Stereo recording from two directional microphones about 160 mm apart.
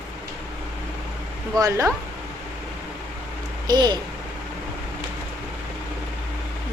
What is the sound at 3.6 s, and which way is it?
Speech, 25° right (ahead or behind).